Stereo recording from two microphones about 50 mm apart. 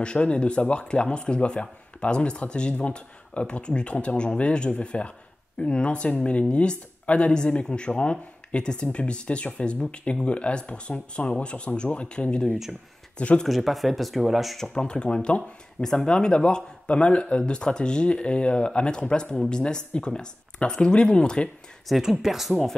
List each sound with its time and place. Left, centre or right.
0.0 s speech: centre
13.5 s speech: centre
14.6 s speech: centre
21.8 s speech: centre